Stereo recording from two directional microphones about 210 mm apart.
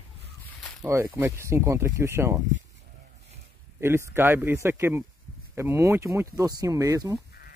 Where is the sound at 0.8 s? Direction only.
10° right (ahead or behind).